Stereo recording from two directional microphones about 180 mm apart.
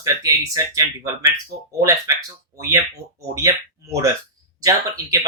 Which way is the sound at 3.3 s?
15° right (ahead or behind).